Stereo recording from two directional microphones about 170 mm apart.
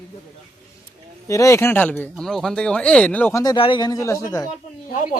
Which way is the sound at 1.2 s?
20° left (ahead or behind).